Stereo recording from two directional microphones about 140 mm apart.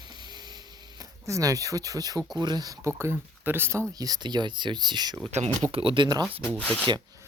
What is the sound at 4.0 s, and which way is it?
Speech, 30° right (ahead or behind).